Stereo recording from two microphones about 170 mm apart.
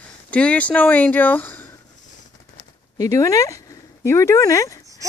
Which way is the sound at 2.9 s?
20° left (ahead or behind).